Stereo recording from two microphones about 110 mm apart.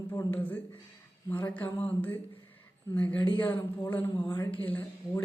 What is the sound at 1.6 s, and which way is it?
Speech, 15° left (ahead or behind).